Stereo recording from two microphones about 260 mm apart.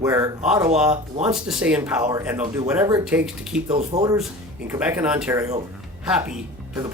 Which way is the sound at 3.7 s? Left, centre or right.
Right.